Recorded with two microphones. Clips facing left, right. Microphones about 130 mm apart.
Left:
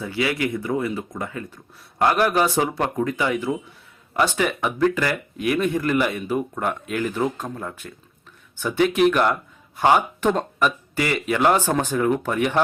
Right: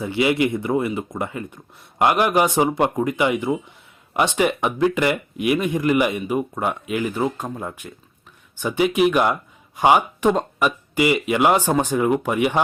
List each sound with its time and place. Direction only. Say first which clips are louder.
0.0 s speech: right 5 dB; 20° right (ahead or behind)